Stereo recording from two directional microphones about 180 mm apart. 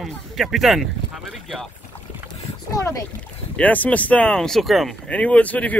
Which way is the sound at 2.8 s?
15° left (ahead or behind).